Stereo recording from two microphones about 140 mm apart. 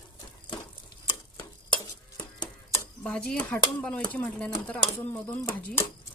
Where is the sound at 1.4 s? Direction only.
35° left (ahead or behind).